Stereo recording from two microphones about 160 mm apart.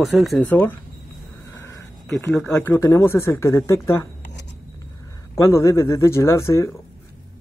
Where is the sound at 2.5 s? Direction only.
15° left (ahead or behind).